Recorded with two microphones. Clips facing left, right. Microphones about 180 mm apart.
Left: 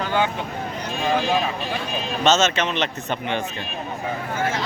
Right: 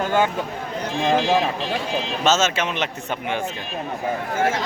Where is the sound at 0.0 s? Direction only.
45° right (ahead or behind).